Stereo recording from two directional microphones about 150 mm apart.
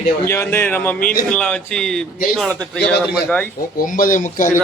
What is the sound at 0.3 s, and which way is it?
A man's voice, 15° left (ahead or behind).